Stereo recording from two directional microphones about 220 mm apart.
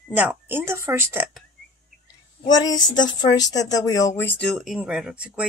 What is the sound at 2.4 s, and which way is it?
A woman's voice, 20° left (ahead or behind).